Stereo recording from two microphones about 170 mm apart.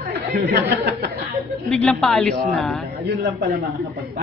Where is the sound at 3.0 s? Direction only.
75° right (ahead or behind).